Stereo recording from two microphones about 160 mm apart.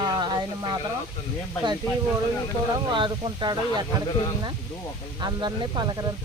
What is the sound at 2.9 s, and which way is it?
Speech, 30° right (ahead or behind).